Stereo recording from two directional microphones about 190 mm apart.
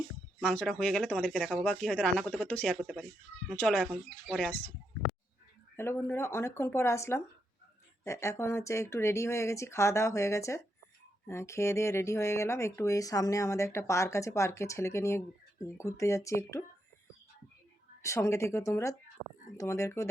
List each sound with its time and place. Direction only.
0.3 s speech: 5° left (ahead or behind)
5.7 s speech: 10° left (ahead or behind)
18.0 s speech: 15° left (ahead or behind)